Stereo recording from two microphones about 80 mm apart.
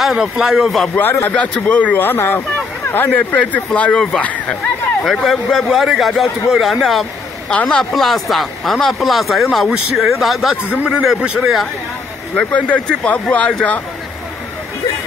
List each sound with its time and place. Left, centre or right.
0.0 s speech: centre
0.9 s speech: left
1.3 s speech: centre
4.2 s speech: centre
5.0 s speech: centre
7.5 s speech: centre
7.9 s speech: centre
10.8 s speech: centre
12.4 s speech: centre